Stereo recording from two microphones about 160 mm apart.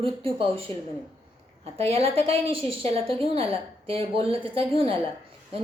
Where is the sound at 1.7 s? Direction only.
40° right (ahead or behind).